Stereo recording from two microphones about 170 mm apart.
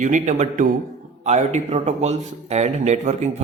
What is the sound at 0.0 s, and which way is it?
A man's voice, 45° right (ahead or behind).